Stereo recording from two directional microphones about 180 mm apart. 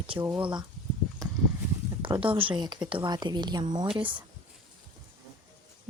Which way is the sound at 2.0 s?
30° right (ahead or behind).